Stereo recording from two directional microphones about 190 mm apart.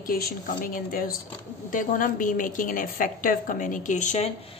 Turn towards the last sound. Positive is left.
turn(degrees=35)  # may be behind; listen again after turning